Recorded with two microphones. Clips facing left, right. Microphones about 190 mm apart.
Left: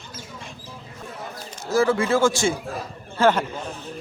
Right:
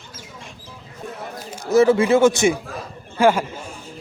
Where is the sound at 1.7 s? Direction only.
20° right (ahead or behind).